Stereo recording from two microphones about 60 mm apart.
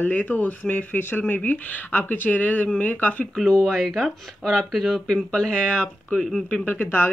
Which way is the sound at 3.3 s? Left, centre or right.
Centre.